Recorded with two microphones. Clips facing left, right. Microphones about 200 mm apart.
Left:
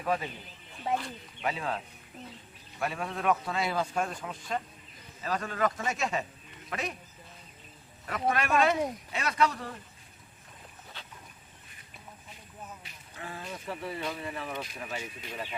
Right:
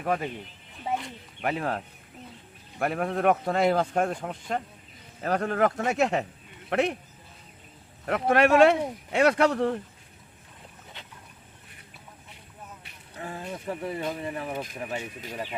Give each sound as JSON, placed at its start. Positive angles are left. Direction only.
{"t": 0.0, "sound": "speech", "side_deg": -55}
{"t": 0.9, "sound": "speech", "side_deg": -20}
{"t": 1.4, "sound": "a man's voice", "side_deg": -55}
{"t": 8.0, "sound": "a man's voice", "side_deg": -65}
{"t": 13.1, "sound": "a sound", "side_deg": -45}
{"t": 13.7, "sound": "speech", "side_deg": -45}